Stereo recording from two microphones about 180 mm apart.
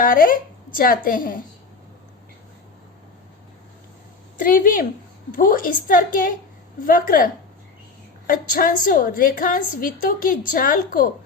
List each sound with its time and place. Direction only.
0.0 s a woman's voice: 50° left (ahead or behind)
4.4 s a woman's voice: 50° left (ahead or behind)
8.3 s a woman's voice: 50° left (ahead or behind)